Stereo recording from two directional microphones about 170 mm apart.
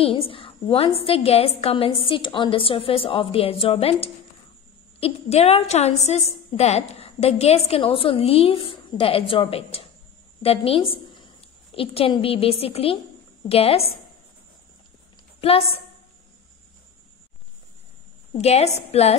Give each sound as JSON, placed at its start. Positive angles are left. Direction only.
{"t": 0.0, "sound": "a woman's voice", "side_deg": 35}
{"t": 15.4, "sound": "a woman's voice", "side_deg": 35}
{"t": 18.4, "sound": "a woman's voice", "side_deg": 40}